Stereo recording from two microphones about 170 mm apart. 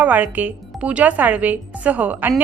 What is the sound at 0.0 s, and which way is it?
A woman's voice, 10° right (ahead or behind).